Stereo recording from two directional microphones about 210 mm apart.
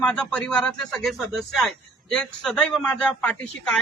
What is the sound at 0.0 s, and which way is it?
Speech, 5° left (ahead or behind).